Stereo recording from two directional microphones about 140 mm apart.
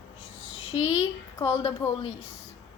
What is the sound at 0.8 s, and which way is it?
A woman's voice, 25° left (ahead or behind).